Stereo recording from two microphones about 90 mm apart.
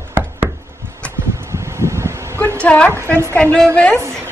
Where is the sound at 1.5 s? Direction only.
30° right (ahead or behind).